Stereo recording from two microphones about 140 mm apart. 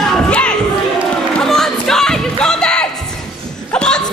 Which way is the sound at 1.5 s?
5° left (ahead or behind).